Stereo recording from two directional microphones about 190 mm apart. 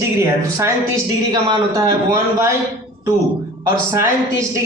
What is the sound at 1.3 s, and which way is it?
Speech, 25° right (ahead or behind).